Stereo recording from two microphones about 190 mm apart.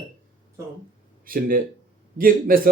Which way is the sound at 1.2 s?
50° right (ahead or behind).